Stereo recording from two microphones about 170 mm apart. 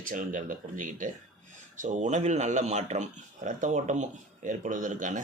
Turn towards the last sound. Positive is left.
turn(degrees=-50)  # may be behind; listen again after turning